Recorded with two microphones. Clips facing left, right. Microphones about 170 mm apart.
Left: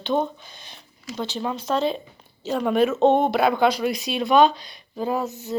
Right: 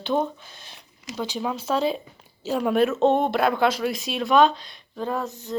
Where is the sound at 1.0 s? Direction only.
15° right (ahead or behind).